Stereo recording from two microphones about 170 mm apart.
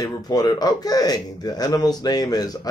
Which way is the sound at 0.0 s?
20° left (ahead or behind).